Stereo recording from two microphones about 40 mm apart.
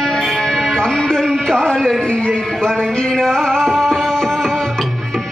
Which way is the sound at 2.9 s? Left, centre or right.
Centre.